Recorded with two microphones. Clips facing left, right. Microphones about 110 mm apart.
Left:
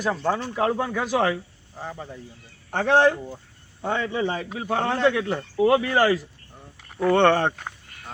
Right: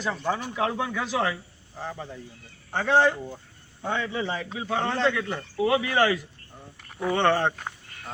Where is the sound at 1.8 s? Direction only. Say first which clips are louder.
Even; 10° left (ahead or behind).